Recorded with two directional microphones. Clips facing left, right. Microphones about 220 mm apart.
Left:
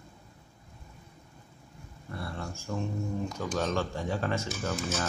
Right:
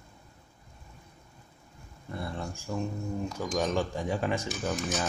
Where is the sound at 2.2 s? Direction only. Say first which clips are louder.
Right 2 dB; 15° right (ahead or behind).